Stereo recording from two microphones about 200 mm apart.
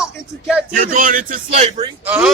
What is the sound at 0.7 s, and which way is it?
A man's voice, 40° right (ahead or behind).